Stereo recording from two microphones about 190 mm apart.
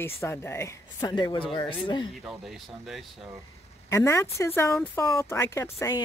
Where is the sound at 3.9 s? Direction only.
15° left (ahead or behind).